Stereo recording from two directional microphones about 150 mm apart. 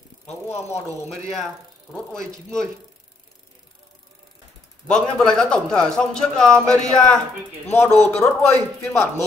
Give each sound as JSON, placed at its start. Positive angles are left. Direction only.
{"t": 1.1, "sound": "a man's voice", "side_deg": 0}
{"t": 4.8, "sound": "a man's voice", "side_deg": 5}